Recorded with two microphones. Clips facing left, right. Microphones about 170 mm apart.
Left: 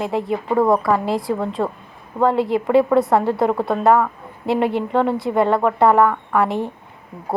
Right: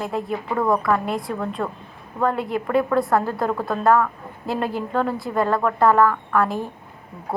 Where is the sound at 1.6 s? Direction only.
20° left (ahead or behind).